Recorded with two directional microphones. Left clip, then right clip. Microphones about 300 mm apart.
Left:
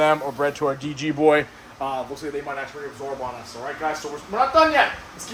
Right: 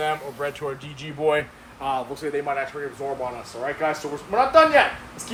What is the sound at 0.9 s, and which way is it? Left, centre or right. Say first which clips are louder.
Speech: left 4 dB; left.